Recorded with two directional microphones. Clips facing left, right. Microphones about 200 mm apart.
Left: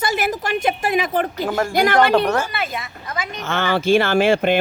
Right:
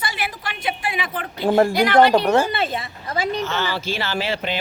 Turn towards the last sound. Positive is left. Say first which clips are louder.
# left 9 dB
turn(degrees=50)  # may be behind; listen again after turning